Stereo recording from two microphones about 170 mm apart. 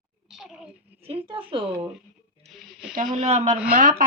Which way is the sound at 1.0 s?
35° right (ahead or behind).